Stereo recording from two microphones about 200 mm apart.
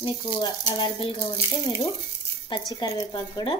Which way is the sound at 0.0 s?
25° left (ahead or behind).